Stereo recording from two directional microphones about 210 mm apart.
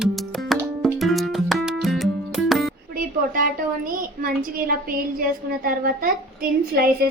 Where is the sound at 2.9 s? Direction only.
40° right (ahead or behind).